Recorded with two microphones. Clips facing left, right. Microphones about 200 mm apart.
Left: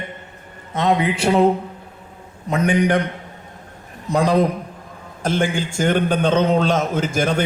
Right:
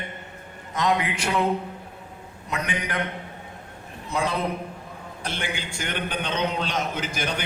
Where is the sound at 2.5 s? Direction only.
45° left (ahead or behind).